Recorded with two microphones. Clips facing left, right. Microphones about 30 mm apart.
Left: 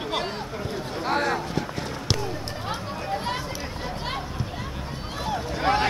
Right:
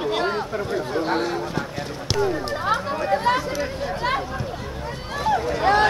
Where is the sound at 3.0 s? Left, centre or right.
Right.